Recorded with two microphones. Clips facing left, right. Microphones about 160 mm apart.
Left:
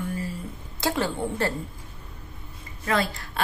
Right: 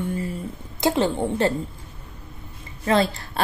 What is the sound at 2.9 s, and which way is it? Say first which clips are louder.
Speech: right 5 dB; 30° right (ahead or behind).